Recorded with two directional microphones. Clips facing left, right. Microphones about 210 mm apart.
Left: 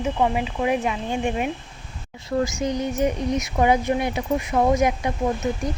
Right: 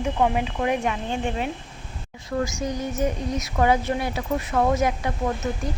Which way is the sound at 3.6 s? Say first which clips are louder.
Left 1 dB; 15° left (ahead or behind).